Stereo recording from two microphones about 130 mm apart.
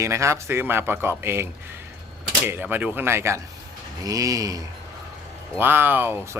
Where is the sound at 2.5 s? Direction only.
15° right (ahead or behind).